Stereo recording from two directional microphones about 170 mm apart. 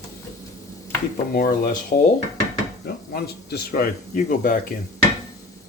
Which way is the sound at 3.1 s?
65° left (ahead or behind).